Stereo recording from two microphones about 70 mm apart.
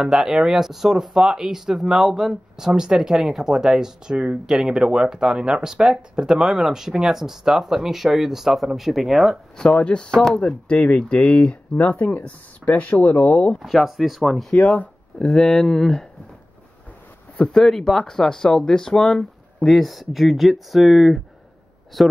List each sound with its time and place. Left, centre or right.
0.0 s speech: centre
9.6 s speech: centre
13.6 s speech: centre
14.5 s speech: left; by 16.1 s centre
17.6 s speech: centre